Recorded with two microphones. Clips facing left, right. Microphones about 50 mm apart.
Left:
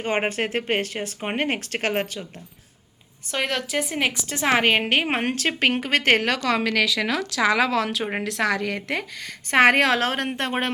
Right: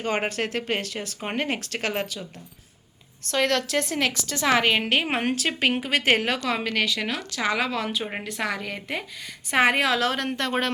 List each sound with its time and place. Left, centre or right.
0.0 s speech: left
3.2 s a woman's voice: centre; by 6.4 s left
6.5 s a woman's voice: left
7.4 s a woman's voice: left